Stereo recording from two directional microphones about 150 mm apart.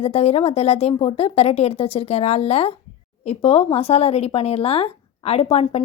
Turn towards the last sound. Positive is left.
turn(degrees=45)  # may be behind; listen again after turning